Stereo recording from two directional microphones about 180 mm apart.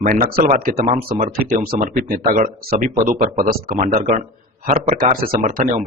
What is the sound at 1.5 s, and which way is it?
A man's voice, 50° right (ahead or behind).